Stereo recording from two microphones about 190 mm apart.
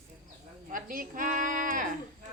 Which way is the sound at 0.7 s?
45° right (ahead or behind).